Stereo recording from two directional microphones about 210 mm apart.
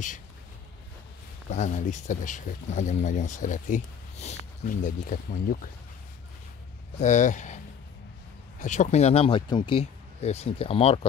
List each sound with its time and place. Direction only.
1.5 s speech: 35° left (ahead or behind)
7.0 s speech: 35° left (ahead or behind)